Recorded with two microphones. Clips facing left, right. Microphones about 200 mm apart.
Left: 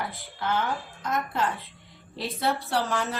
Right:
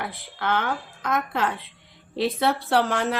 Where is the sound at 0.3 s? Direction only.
65° right (ahead or behind).